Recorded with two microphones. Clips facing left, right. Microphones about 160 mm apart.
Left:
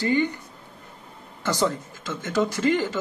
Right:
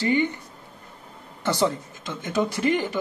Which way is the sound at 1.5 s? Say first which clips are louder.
Right 1 dB; 20° right (ahead or behind).